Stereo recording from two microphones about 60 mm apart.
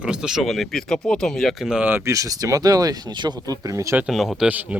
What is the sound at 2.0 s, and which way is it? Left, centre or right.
Speech, right.